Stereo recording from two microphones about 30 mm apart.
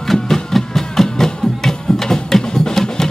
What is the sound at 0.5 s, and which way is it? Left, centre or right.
Music, centre.